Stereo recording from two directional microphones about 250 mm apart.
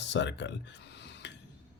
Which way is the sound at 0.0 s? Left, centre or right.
Left.